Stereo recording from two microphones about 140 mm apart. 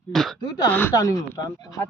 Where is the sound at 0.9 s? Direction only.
25° left (ahead or behind).